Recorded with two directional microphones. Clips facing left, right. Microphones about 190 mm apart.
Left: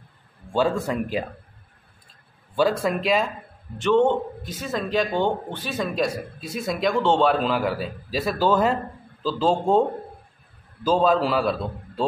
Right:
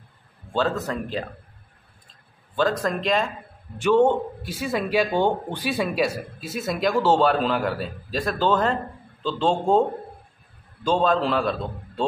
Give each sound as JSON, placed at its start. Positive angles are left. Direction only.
{"t": 0.5, "sound": "a man's voice", "side_deg": 10}
{"t": 2.8, "sound": "a man's voice", "side_deg": 5}
{"t": 3.7, "sound": "a man's voice", "side_deg": -10}